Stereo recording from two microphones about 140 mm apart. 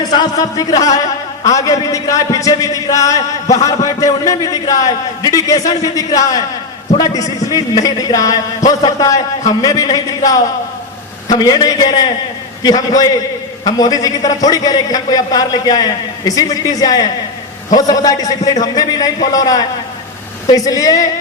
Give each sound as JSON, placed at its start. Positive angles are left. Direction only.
{"t": 0.0, "sound": "a man's voice", "side_deg": 30}
{"t": 20.5, "sound": "a man's voice", "side_deg": 25}